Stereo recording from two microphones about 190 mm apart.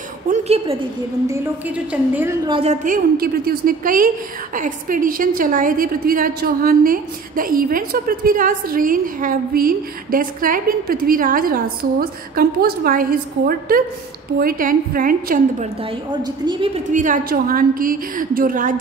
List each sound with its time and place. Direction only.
0.3 s a woman's voice: 35° right (ahead or behind)
1.9 s a woman's voice: 10° right (ahead or behind)
2.4 s a woman's voice: 30° right (ahead or behind); by 15.7 s 45° right (ahead or behind)
16.1 s a woman's voice: 25° right (ahead or behind)
16.9 s a woman's voice: 45° right (ahead or behind)